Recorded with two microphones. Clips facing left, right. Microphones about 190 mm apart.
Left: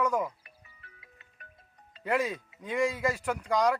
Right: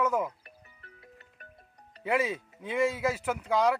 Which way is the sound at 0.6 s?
50° right (ahead or behind).